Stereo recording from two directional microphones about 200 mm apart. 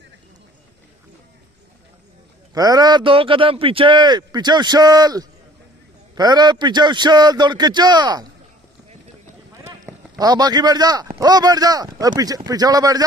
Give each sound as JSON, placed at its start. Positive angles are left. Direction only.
{"t": 2.5, "sound": "a man's voice", "side_deg": -20}
{"t": 9.7, "sound": "speech", "side_deg": -20}